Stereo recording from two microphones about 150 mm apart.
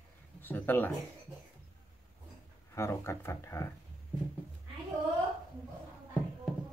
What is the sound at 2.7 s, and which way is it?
Speech, 20° left (ahead or behind).